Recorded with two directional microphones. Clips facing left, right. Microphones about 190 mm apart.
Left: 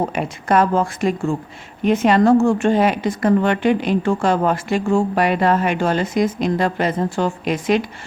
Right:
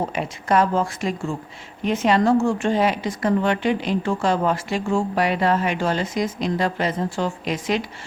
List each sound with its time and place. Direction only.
0.1 s a woman's voice: 55° left (ahead or behind)